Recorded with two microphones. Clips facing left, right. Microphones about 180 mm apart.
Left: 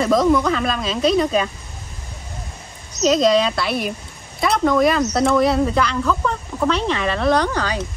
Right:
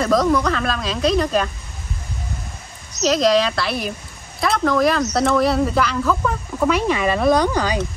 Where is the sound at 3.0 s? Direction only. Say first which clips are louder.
Left 1 dB; centre (ahead or behind).